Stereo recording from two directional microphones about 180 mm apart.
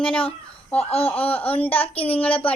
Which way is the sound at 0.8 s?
35° left (ahead or behind).